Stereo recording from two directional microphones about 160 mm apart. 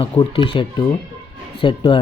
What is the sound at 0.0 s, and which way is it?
Speech, 30° left (ahead or behind).